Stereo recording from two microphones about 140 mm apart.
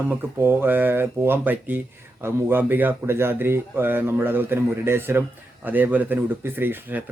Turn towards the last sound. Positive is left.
turn(degrees=-15)  # may be behind; listen again after turning